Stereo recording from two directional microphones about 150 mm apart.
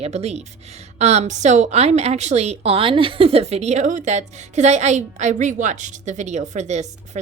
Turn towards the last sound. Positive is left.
turn(degrees=-50)  # may be behind; listen again after turning